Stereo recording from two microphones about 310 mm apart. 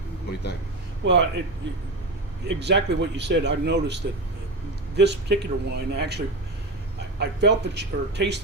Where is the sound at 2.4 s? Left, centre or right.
Right.